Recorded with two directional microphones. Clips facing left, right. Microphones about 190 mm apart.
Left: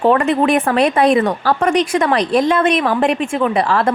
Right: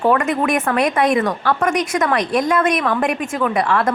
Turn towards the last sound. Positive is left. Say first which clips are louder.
# left 2 dB
turn(degrees=30)  # may be behind; listen again after turning